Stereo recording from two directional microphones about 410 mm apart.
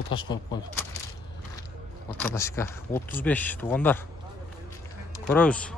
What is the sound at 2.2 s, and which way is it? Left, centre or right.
Speech, centre.